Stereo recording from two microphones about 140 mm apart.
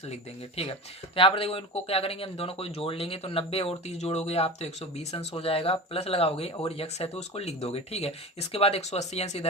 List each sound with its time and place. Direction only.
0.1 s speech: 45° left (ahead or behind)